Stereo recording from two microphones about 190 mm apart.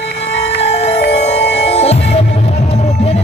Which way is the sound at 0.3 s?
35° left (ahead or behind).